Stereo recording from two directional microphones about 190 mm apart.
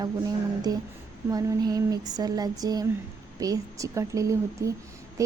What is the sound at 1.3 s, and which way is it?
A woman's voice, 20° right (ahead or behind).